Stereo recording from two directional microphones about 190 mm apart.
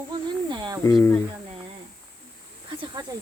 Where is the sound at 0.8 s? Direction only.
15° left (ahead or behind).